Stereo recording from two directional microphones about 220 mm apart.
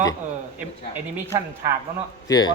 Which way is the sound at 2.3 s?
20° left (ahead or behind).